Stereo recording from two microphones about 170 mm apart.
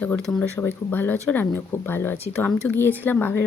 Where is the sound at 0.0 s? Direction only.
5° left (ahead or behind).